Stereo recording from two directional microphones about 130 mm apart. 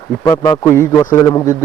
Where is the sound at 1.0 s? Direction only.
30° left (ahead or behind).